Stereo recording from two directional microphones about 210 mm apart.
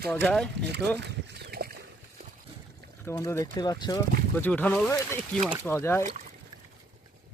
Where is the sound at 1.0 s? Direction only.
55° right (ahead or behind).